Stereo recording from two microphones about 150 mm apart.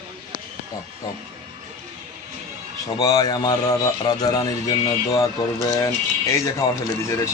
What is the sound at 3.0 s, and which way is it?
A man's voice, 25° left (ahead or behind).